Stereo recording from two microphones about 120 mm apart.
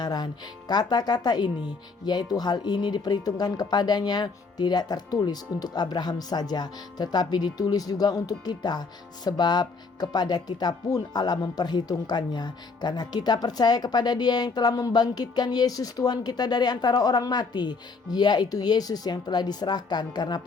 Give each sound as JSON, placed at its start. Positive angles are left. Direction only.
{"t": 0.0, "sound": "speech", "side_deg": 35}